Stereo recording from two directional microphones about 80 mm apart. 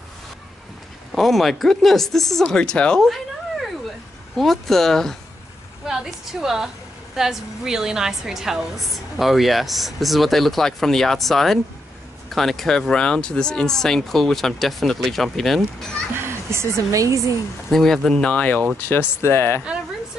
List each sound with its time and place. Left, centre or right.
1.1 s speech: centre
16.4 s a woman's voice: right
17.6 s speech: centre
18.9 s speech: left